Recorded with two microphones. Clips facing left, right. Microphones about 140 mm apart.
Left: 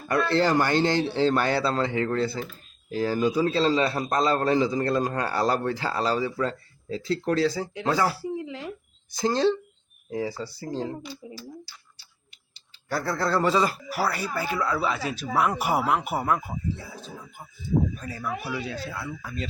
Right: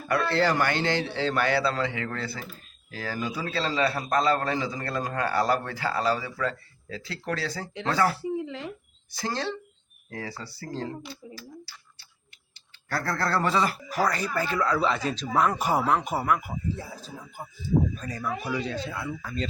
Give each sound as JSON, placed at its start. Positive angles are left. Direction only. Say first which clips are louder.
{"t": 0.1, "sound": "a man's voice", "louder": "left 2 dB", "side_deg": 25}
{"t": 7.4, "sound": "speech", "louder": "left 5 dB", "side_deg": 10}
{"t": 9.1, "sound": "a man's voice", "louder": "left 8 dB", "side_deg": 20}
{"t": 12.9, "sound": "speech", "louder": "left 2 dB", "side_deg": 15}
{"t": 16.2, "sound": "a man's voice", "louder": "even", "side_deg": 25}
{"t": 16.7, "sound": "speech", "louder": "right 1 dB", "side_deg": -40}
{"t": 17.9, "sound": "speech", "louder": "even", "side_deg": 10}